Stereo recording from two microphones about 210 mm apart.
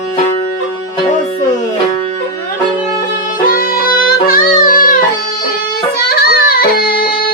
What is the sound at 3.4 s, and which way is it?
Music, 45° left (ahead or behind).